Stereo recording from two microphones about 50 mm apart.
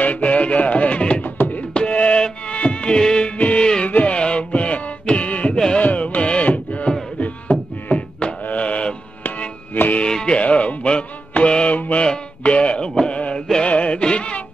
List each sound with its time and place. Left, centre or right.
0.0 s music: left
1.7 s music: left
3.3 s music: left
5.8 s carnatic music: left
7.2 s mantra: left
9.8 s music: left
10.0 s music: centre